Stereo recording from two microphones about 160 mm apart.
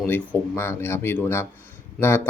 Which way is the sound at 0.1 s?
10° left (ahead or behind).